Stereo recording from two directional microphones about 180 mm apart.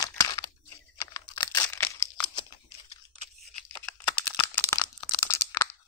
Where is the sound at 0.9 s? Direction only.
20° left (ahead or behind).